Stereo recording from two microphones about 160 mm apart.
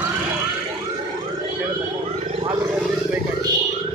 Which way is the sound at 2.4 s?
30° right (ahead or behind).